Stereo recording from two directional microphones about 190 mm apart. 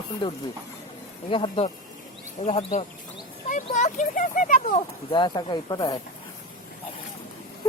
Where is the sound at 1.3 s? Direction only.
25° left (ahead or behind).